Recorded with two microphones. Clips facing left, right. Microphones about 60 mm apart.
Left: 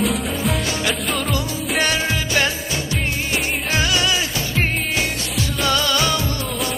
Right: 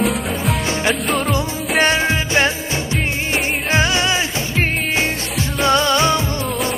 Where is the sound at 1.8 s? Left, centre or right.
Right.